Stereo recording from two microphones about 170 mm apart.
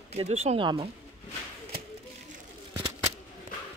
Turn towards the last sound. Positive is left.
turn(degrees=-20)  # may be behind; listen again after turning